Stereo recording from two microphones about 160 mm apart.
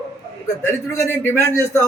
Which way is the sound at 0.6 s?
15° left (ahead or behind).